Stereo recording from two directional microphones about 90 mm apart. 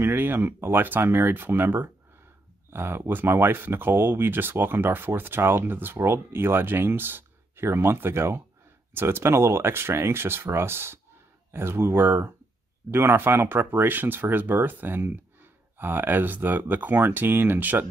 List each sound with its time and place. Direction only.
0.0 s speech: 25° right (ahead or behind)